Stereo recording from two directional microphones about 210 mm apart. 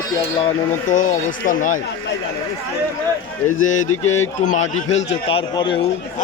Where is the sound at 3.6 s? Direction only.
35° left (ahead or behind).